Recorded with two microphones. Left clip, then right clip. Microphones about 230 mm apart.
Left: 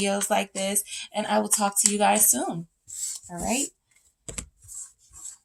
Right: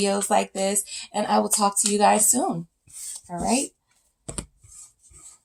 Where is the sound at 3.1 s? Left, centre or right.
Left.